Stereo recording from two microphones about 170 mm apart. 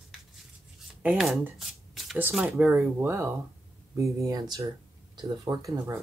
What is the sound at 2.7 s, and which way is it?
Speech, 15° right (ahead or behind).